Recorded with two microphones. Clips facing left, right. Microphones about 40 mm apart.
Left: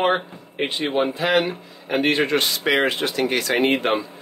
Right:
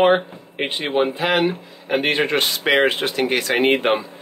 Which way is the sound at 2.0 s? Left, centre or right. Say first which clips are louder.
Left 1 dB; right.